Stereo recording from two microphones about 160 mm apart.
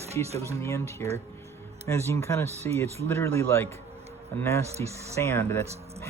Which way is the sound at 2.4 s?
40° right (ahead or behind).